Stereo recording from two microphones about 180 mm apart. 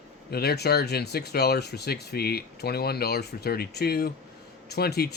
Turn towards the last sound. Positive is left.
turn(degrees=60)  # may be behind; listen again after turning